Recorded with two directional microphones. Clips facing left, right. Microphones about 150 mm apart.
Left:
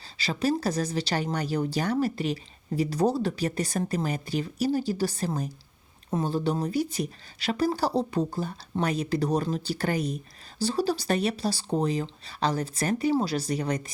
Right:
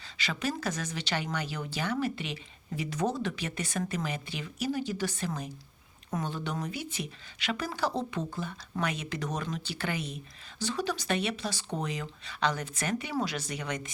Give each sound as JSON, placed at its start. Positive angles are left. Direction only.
{"t": 0.2, "sound": "speech", "side_deg": 35}